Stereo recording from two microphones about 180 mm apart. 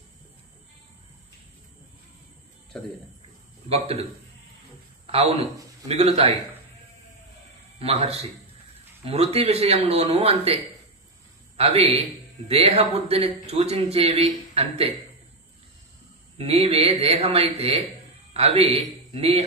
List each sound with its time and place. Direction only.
3.6 s a man's voice: 35° right (ahead or behind)
5.0 s a man's voice: 35° right (ahead or behind)
7.8 s a man's voice: 35° right (ahead or behind)
16.3 s a man's voice: 35° right (ahead or behind)